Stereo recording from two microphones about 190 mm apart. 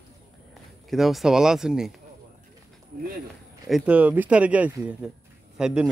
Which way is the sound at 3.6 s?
5° right (ahead or behind).